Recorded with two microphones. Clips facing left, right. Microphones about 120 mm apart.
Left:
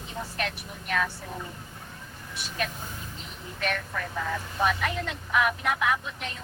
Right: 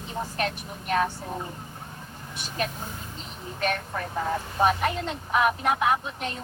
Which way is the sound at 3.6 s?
35° right (ahead or behind).